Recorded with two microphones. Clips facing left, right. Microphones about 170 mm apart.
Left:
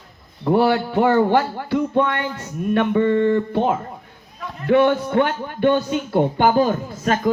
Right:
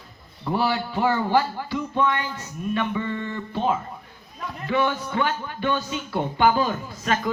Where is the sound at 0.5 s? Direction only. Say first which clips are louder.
Left 7 dB; 55° left (ahead or behind).